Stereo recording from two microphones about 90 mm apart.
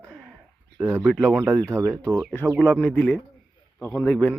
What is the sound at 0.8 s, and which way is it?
Speech, 30° right (ahead or behind).